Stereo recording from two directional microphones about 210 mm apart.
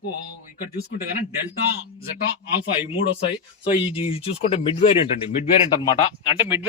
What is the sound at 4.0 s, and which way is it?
Speech, 25° left (ahead or behind).